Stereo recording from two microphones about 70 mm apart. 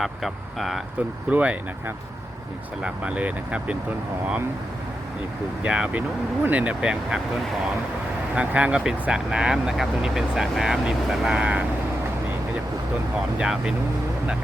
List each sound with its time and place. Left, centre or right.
0.0 s speech: centre
1.3 s speech: centre
2.8 s speech: centre
5.6 s speech: centre
8.4 s speech: centre
13.4 s speech: centre